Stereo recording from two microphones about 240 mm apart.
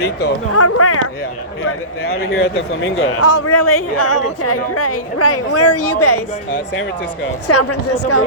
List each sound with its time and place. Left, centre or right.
0.0 s speech: left
0.5 s speech: left
2.2 s speech: left
3.0 s speech: left
7.4 s speech: left